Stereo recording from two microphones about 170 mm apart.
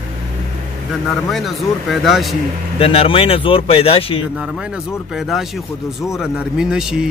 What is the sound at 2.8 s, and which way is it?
A man's voice, 35° left (ahead or behind).